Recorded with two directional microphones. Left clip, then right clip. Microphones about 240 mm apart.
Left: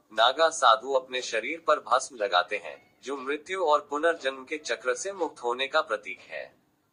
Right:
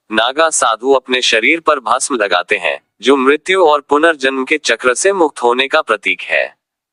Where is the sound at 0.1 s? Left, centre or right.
Right.